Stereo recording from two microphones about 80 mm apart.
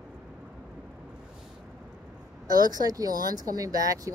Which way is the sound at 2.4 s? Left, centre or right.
Right.